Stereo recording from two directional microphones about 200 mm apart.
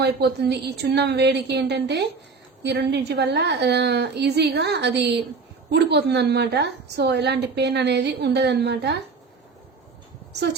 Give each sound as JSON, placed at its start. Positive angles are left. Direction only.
{"t": 0.0, "sound": "a woman's voice", "side_deg": -55}